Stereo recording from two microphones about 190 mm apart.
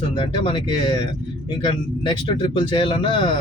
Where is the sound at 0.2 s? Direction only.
25° left (ahead or behind).